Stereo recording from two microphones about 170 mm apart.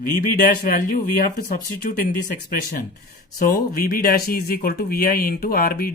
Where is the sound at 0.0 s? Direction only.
55° left (ahead or behind).